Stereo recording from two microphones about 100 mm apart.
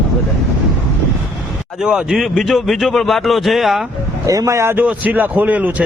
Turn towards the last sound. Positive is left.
turn(degrees=-15)  # may be behind; listen again after turning